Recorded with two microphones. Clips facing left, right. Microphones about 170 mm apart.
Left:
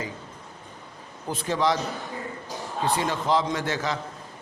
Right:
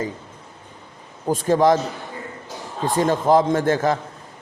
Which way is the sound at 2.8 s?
45° right (ahead or behind).